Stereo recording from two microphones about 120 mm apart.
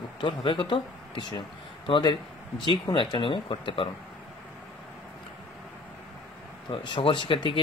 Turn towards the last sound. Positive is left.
turn(degrees=45)  # may be behind; listen again after turning